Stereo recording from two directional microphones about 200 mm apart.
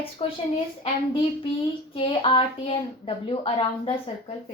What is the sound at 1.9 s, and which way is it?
A woman's voice, 25° left (ahead or behind).